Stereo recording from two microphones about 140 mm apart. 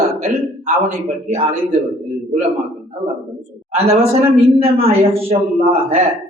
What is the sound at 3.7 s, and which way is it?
Speech, 45° right (ahead or behind).